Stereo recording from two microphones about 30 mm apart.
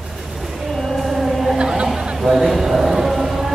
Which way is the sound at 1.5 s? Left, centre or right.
Right.